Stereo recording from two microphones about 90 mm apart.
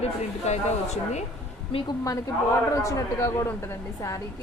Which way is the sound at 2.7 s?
40° left (ahead or behind).